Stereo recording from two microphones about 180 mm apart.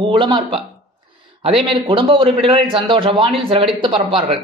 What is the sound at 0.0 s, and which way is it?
Speech, 25° right (ahead or behind).